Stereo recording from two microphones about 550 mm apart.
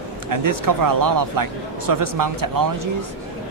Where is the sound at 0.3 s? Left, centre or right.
Right.